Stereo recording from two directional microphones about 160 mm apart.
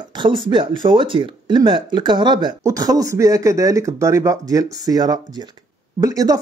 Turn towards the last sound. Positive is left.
turn(degrees=-25)  # may be behind; listen again after turning